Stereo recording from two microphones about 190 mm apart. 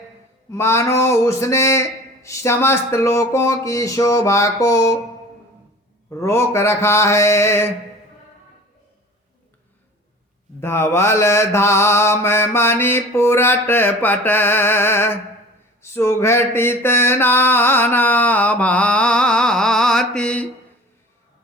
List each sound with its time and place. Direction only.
0.5 s mantra: 15° left (ahead or behind)
6.1 s mantra: 15° left (ahead or behind)
10.6 s mantra: 15° left (ahead or behind)